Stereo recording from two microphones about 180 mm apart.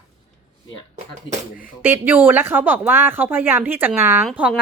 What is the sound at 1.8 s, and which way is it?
Speech, 10° right (ahead or behind).